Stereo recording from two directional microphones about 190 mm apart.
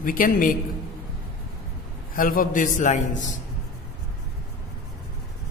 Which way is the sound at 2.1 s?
45° left (ahead or behind).